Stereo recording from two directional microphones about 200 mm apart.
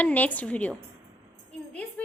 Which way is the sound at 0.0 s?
10° left (ahead or behind).